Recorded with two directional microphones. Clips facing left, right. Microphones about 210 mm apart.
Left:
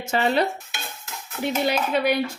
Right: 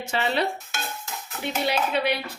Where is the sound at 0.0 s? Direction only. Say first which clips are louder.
Left 4 dB; 45° left (ahead or behind).